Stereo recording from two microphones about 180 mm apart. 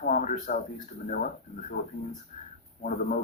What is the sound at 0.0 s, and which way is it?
Speech, 45° left (ahead or behind).